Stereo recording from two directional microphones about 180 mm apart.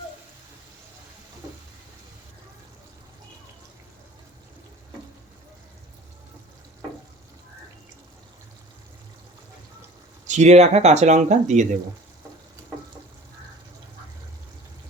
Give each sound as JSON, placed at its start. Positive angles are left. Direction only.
{"t": 10.2, "sound": "speech", "side_deg": -40}